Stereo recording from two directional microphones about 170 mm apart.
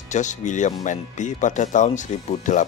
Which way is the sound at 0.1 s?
45° left (ahead or behind).